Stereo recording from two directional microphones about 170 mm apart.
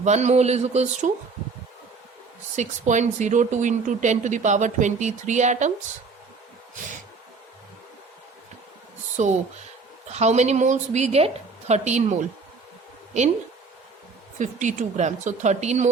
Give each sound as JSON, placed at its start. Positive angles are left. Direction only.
{"t": 0.0, "sound": "a woman's voice", "side_deg": -40}
{"t": 2.6, "sound": "speech", "side_deg": -45}
{"t": 9.2, "sound": "a woman's voice", "side_deg": -45}
{"t": 14.3, "sound": "speech", "side_deg": -45}